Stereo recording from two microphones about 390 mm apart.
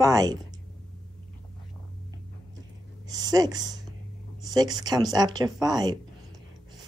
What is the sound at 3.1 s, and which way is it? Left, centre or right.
Speech, centre.